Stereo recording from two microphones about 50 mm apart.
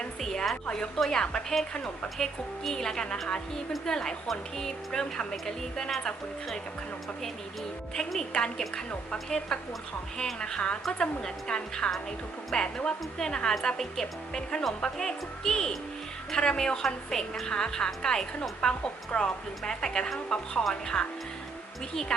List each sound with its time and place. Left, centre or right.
0.0 s a woman's voice: centre
2.1 s a woman's voice: centre
8.3 s a woman's voice: centre